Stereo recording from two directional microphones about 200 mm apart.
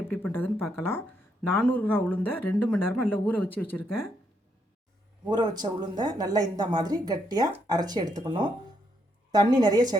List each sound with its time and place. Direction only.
0.1 s speech: 10° left (ahead or behind)
5.3 s speech: 20° right (ahead or behind)